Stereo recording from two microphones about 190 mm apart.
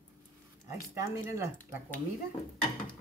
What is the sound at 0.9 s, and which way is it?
Speech, 15° right (ahead or behind).